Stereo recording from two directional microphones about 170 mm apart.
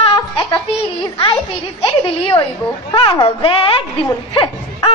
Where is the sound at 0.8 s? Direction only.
30° left (ahead or behind).